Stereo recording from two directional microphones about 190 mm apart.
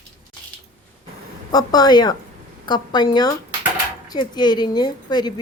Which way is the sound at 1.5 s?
20° left (ahead or behind).